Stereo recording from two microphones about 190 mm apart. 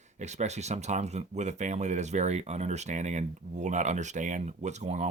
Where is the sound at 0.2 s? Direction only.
35° right (ahead or behind).